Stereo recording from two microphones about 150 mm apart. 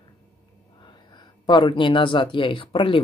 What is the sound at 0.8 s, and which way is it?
Speech, 30° left (ahead or behind).